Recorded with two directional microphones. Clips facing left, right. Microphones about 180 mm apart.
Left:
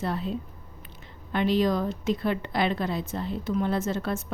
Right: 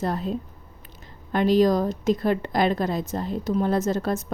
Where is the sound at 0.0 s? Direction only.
45° right (ahead or behind).